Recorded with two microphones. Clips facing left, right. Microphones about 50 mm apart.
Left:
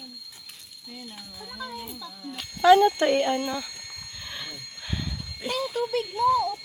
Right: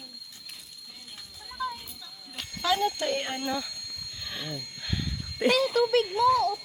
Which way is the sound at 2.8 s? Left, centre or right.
Left.